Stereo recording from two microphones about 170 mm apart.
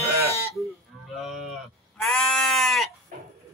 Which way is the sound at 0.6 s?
Centre (ahead or behind).